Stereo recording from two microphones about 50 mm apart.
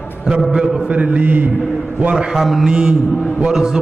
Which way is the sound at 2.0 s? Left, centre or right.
Centre.